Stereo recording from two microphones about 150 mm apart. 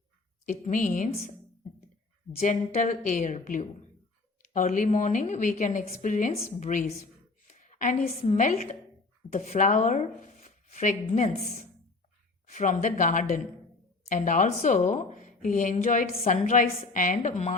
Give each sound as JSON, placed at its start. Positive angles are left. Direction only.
{"t": 0.4, "sound": "a woman's voice", "side_deg": 60}
{"t": 2.4, "sound": "a woman's voice", "side_deg": 55}
{"t": 6.6, "sound": "a sound", "side_deg": 55}
{"t": 8.2, "sound": "a woman's voice", "side_deg": 50}